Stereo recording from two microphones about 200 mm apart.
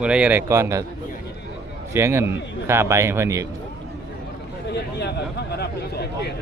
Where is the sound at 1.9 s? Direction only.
10° right (ahead or behind).